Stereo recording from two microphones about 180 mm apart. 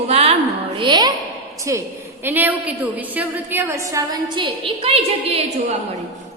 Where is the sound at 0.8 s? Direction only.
25° right (ahead or behind).